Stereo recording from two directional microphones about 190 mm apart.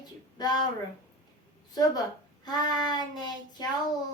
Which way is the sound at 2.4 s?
20° left (ahead or behind).